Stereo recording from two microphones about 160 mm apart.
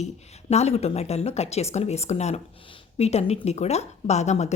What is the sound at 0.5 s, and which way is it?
Speech, 40° left (ahead or behind).